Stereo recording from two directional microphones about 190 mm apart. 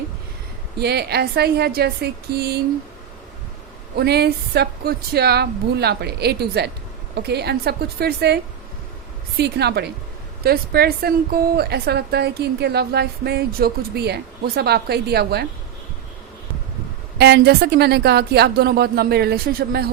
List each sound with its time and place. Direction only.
0.8 s a woman's voice: 60° right (ahead or behind)
3.9 s a woman's voice: 60° right (ahead or behind)
9.4 s a woman's voice: 60° right (ahead or behind)
17.2 s a woman's voice: 60° right (ahead or behind)